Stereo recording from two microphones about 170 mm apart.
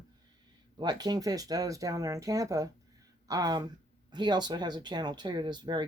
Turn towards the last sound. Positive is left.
turn(degrees=-25)  # may be behind; listen again after turning